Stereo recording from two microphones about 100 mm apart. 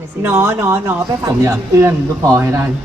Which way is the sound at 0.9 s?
30° right (ahead or behind).